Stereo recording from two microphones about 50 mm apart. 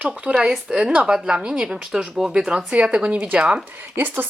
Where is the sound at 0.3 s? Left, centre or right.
Right.